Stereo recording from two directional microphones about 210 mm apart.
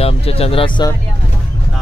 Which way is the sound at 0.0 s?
30° left (ahead or behind).